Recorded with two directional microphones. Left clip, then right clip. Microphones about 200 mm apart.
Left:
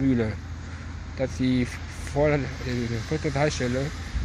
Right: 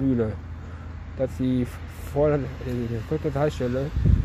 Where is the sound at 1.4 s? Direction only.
60° right (ahead or behind).